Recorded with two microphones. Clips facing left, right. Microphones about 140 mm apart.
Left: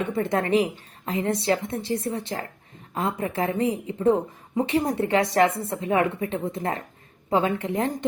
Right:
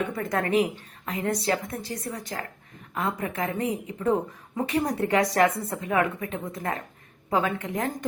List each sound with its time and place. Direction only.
0.1 s a woman's voice: 25° left (ahead or behind)